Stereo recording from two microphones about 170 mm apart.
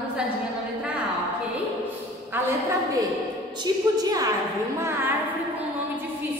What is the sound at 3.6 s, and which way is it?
Speech, 20° right (ahead or behind).